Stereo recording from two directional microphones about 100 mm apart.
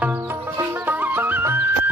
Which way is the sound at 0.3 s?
25° right (ahead or behind).